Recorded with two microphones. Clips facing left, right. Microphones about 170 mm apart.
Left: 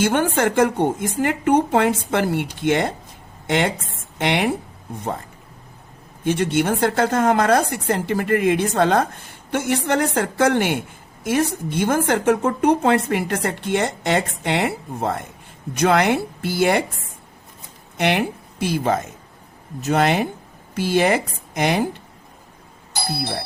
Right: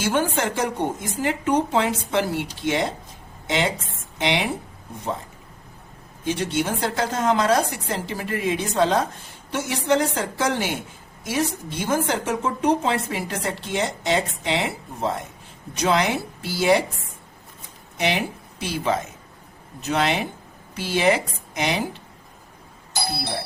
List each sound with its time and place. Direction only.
0.0 s a woman's voice: 60° left (ahead or behind)
6.2 s a woman's voice: 55° left (ahead or behind)
17.9 s speech: 60° left (ahead or behind)